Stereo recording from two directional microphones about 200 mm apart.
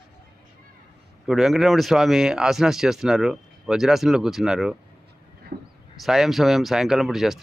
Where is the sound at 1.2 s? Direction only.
Centre (ahead or behind).